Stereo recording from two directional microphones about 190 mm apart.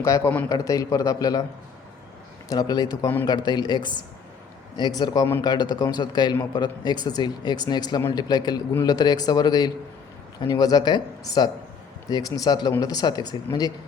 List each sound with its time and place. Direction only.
0.0 s a man's voice: 15° left (ahead or behind)
2.5 s speech: 20° left (ahead or behind)